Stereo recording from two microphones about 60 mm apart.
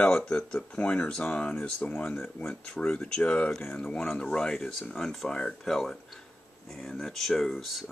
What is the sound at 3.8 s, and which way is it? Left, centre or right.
Speech, centre.